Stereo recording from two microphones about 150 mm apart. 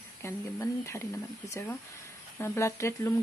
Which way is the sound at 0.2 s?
20° left (ahead or behind).